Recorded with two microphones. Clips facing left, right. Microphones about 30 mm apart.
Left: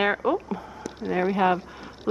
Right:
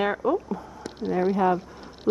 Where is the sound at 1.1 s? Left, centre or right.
Left.